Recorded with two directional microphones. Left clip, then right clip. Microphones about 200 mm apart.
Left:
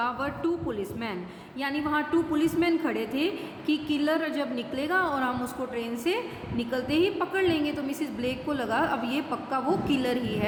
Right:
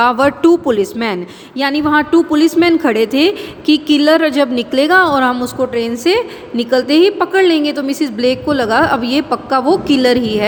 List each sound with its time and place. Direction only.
0.0 s a woman's voice: 50° right (ahead or behind)